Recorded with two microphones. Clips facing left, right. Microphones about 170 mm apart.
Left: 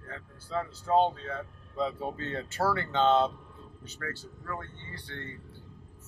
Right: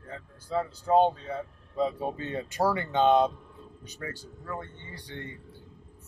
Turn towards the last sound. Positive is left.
turn(degrees=-15)  # may be behind; listen again after turning